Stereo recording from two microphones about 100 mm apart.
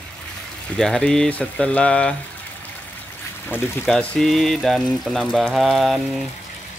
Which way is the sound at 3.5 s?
20° left (ahead or behind).